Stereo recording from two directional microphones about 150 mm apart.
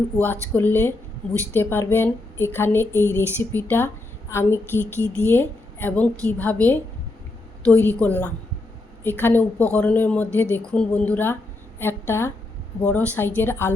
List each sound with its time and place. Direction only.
0.5 s speech: 15° left (ahead or behind)
4.7 s a sound: 15° right (ahead or behind)
5.0 s a woman's voice: 15° left (ahead or behind)